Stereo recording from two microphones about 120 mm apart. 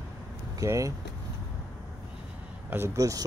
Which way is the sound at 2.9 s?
30° right (ahead or behind).